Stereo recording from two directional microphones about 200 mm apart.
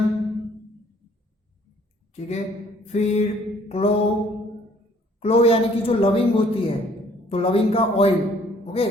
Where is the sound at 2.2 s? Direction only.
30° left (ahead or behind).